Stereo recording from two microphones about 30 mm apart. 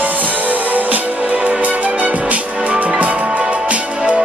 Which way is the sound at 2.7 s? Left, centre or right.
Right.